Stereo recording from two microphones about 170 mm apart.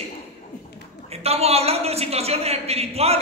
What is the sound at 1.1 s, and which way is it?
A woman's voice, 35° right (ahead or behind).